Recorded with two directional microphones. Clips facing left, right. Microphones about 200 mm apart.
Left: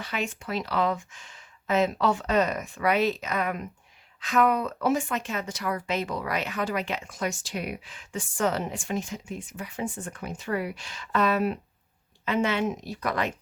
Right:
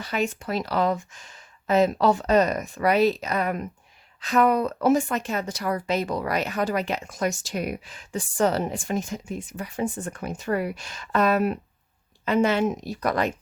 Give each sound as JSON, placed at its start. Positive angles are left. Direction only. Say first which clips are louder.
{"t": 0.0, "sound": "speech", "louder": "right 5 dB", "side_deg": -40}